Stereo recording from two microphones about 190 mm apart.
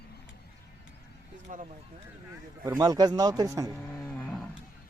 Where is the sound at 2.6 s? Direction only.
20° right (ahead or behind).